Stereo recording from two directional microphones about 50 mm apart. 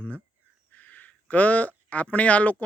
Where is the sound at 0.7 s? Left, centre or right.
Left.